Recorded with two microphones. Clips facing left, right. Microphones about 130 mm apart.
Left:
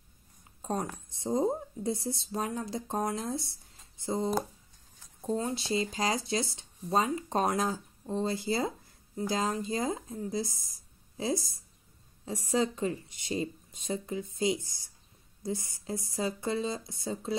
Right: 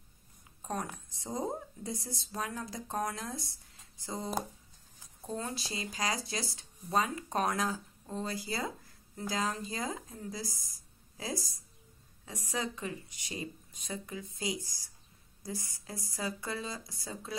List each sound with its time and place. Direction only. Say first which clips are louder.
0.6 s speech: left 4 dB; 25° left (ahead or behind)